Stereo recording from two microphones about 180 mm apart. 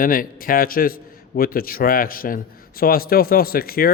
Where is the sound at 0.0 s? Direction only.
50° left (ahead or behind).